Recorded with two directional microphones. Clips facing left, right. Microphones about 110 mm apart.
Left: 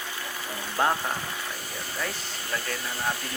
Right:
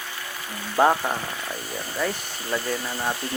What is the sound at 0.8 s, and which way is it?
Speech, 25° right (ahead or behind).